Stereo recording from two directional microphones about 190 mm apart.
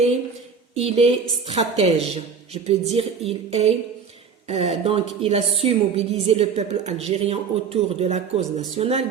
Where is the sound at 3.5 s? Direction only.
35° right (ahead or behind).